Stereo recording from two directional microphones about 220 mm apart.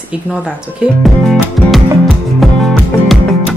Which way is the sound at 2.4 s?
Centre (ahead or behind).